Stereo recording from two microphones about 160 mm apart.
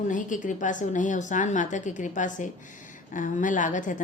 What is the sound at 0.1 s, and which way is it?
A woman's voice, 55° left (ahead or behind).